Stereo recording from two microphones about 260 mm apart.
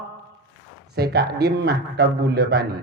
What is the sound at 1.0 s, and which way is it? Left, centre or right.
A man's voice, right.